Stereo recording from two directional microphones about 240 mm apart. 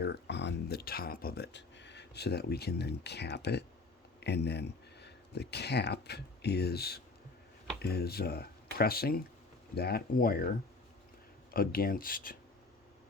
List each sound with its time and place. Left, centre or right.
0.0 s speech: left
11.5 s speech: left